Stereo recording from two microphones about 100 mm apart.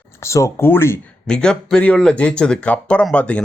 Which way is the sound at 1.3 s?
10° left (ahead or behind).